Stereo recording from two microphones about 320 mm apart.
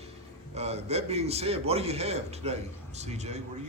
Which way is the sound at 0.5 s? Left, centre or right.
Centre.